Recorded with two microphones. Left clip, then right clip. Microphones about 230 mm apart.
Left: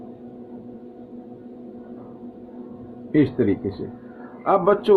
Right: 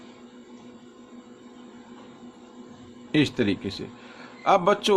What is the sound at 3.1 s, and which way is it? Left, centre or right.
A man's voice, right.